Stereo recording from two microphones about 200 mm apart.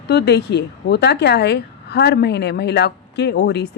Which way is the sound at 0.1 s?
55° left (ahead or behind).